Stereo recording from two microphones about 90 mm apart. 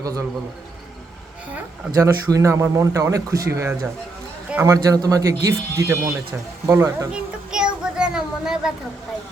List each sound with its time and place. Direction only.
0.0 s a man's voice: 40° right (ahead or behind)
2.0 s a man's voice: 35° right (ahead or behind)
7.1 s a sound: 10° right (ahead or behind)